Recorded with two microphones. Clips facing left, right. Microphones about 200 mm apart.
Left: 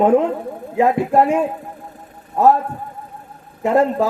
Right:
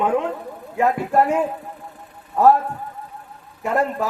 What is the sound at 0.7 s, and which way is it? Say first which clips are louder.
A man's voice: left 4 dB; 25° left (ahead or behind).